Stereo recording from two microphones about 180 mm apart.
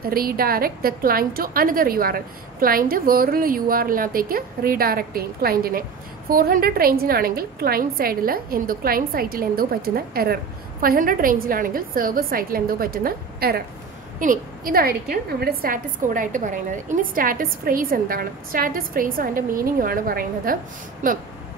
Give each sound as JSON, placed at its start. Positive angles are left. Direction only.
{"t": 0.0, "sound": "a woman's voice", "side_deg": -55}